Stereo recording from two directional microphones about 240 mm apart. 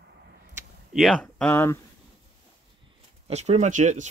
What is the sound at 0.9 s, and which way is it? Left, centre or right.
Speech, centre.